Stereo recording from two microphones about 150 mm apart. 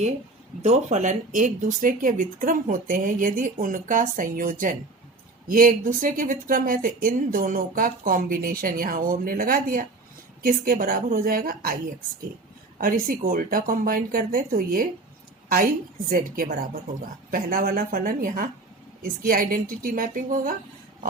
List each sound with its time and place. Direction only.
0.6 s speech: 50° right (ahead or behind); by 11.8 s 75° right (ahead or behind)
12.8 s speech: 65° right (ahead or behind)
16.0 s speech: 65° right (ahead or behind)